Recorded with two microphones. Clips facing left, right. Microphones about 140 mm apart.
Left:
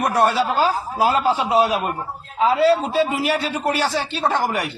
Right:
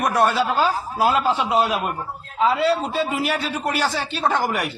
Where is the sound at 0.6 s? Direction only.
35° left (ahead or behind).